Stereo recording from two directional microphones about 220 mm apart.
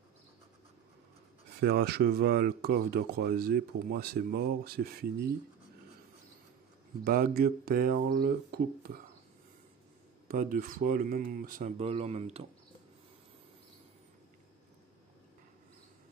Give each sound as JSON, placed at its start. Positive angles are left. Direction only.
{"t": 1.6, "sound": "speech", "side_deg": -45}
{"t": 7.1, "sound": "speech", "side_deg": -40}
{"t": 10.2, "sound": "speech", "side_deg": -40}